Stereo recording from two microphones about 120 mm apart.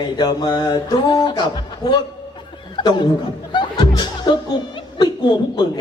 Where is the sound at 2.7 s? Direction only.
45° left (ahead or behind).